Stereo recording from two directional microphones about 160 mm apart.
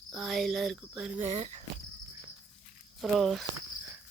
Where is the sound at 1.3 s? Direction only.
45° right (ahead or behind).